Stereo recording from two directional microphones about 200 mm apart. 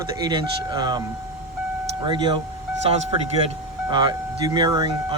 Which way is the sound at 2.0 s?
20° right (ahead or behind).